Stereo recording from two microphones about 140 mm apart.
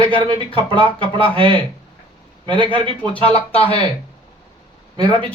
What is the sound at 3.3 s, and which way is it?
Speech, 45° left (ahead or behind).